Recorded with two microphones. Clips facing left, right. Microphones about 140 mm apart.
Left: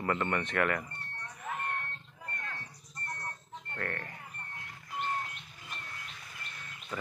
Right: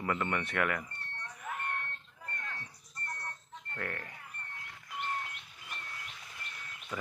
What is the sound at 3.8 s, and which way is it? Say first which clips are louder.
Speech: left 2 dB; 5° right (ahead or behind).